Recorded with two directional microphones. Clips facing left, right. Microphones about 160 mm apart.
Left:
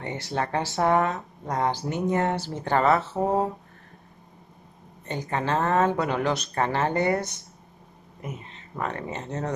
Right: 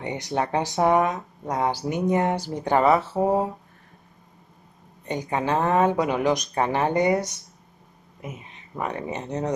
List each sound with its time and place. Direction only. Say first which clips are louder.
0.0 s speech: right 3 dB; 15° right (ahead or behind)
5.0 s speech: right 3 dB; 15° right (ahead or behind)